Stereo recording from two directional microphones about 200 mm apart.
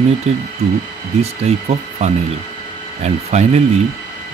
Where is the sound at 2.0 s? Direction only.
35° right (ahead or behind).